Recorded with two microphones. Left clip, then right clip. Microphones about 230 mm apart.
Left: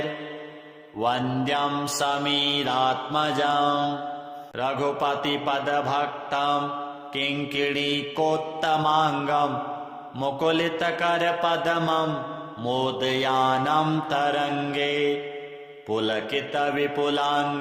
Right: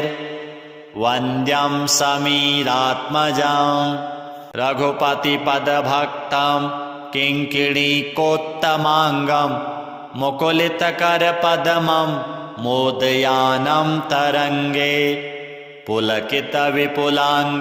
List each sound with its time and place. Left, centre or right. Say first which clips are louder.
0.9 s mantra: right 6 dB; right